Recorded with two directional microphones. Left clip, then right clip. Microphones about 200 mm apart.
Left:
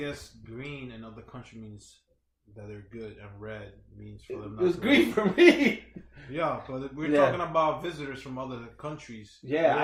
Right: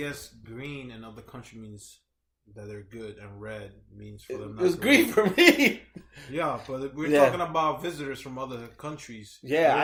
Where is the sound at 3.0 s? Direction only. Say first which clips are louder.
Right 1 dB; 50° right (ahead or behind).